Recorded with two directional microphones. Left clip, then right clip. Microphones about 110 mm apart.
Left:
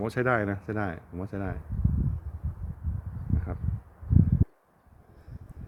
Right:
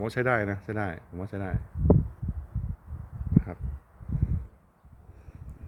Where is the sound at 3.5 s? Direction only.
5° right (ahead or behind).